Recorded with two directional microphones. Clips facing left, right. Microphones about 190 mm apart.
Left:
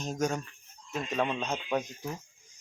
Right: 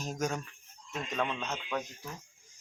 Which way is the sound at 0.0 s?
Centre (ahead or behind).